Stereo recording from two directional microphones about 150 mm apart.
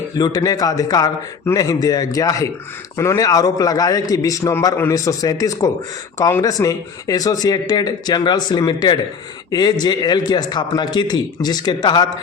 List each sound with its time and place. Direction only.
0.2 s speech: 25° left (ahead or behind)